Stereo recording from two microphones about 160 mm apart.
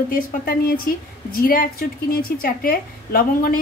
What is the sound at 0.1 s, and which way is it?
A woman's voice, 65° left (ahead or behind).